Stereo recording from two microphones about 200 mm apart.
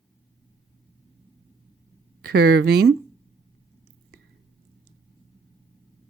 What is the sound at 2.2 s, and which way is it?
Speech, 55° right (ahead or behind).